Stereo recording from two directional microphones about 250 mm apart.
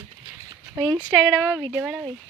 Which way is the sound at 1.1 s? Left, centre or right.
Centre.